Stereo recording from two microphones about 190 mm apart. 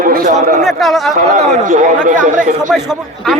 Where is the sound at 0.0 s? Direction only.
45° right (ahead or behind).